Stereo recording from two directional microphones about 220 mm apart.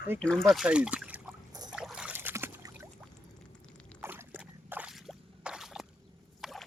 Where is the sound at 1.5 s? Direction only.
20° right (ahead or behind).